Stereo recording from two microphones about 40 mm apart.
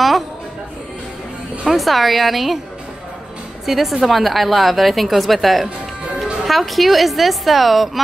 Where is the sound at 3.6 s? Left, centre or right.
Centre.